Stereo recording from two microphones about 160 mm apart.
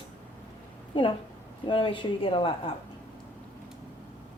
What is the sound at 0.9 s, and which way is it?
A woman's voice, 35° left (ahead or behind).